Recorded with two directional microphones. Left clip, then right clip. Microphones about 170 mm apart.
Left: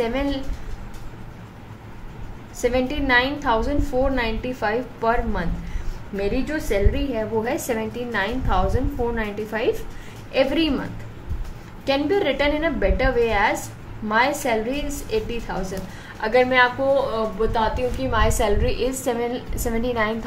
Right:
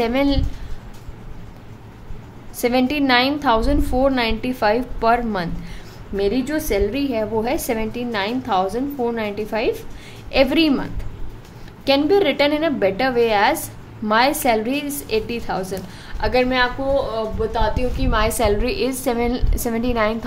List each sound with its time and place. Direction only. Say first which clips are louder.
0.0 s a woman's voice: right 5 dB; 40° right (ahead or behind)
2.6 s a woman's voice: right 3 dB; 40° right (ahead or behind)